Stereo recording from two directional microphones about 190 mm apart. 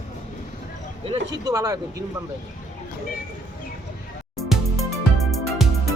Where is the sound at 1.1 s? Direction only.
20° right (ahead or behind).